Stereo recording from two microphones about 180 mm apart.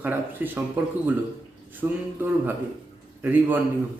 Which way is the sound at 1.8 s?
15° right (ahead or behind).